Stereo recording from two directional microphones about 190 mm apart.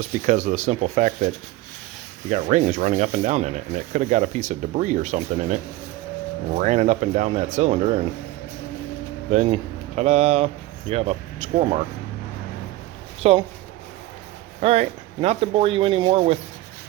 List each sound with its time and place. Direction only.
0.3 s speech: 40° right (ahead or behind)
2.3 s speech: 40° right (ahead or behind)
6.6 s speech: 40° right (ahead or behind)
9.3 s speech: 35° right (ahead or behind)
13.2 s speech: 30° right (ahead or behind)
14.6 s speech: 35° right (ahead or behind)